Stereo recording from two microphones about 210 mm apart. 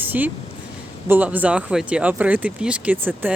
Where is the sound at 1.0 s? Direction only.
10° right (ahead or behind).